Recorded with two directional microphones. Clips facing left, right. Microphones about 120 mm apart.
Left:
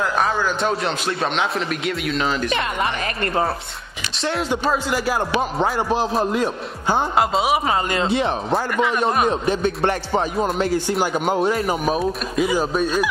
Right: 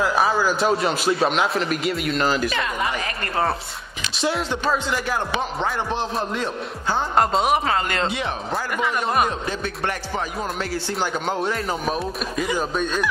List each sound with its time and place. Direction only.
0.0 s a man's voice: 5° right (ahead or behind)
4.2 s a man's voice: 5° right (ahead or behind)
4.6 s music: 5° left (ahead or behind)
7.2 s a man's voice: 5° left (ahead or behind)
7.6 s music: 15° left (ahead or behind)
8.1 s speech: 30° left (ahead or behind)
9.3 s music: 20° left (ahead or behind)